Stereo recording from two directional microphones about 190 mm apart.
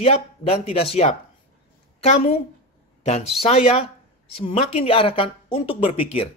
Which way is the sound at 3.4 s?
30° left (ahead or behind).